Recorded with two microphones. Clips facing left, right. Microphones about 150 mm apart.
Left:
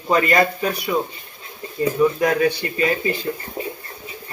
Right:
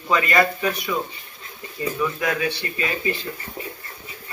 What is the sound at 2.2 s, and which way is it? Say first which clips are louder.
Speech: left 6 dB; 40° left (ahead or behind).